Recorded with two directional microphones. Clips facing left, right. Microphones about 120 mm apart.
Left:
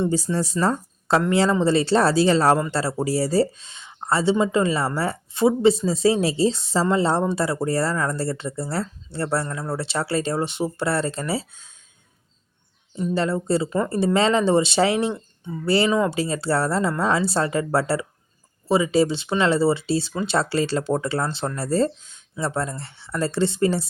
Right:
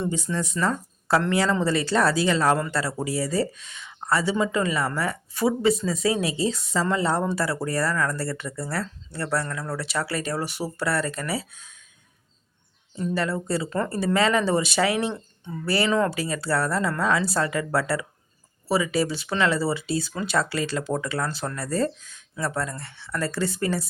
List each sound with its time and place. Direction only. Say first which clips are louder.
0.1 s speech: left 5 dB; 35° left (ahead or behind)
1.3 s speech: left 4 dB; 25° left (ahead or behind)
13.1 s speech: left 5 dB; 25° left (ahead or behind)
13.7 s speech: left 3 dB; 15° left (ahead or behind)